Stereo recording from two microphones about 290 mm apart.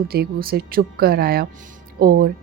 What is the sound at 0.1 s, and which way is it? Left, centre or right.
A woman's voice, right.